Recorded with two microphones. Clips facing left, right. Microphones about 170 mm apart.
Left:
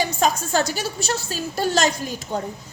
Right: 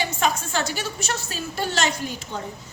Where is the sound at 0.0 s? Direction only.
40° left (ahead or behind).